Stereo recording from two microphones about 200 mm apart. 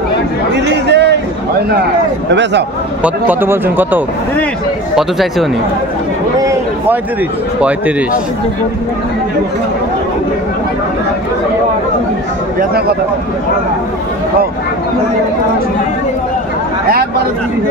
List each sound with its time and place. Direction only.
0.8 s a sound: 60° right (ahead or behind)
3.0 s speech: 10° right (ahead or behind)
12.5 s speech: 50° right (ahead or behind)